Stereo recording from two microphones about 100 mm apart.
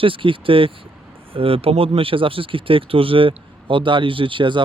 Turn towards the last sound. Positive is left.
turn(degrees=-55)  # may be behind; listen again after turning